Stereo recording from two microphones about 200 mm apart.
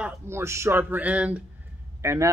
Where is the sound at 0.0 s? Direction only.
15° right (ahead or behind).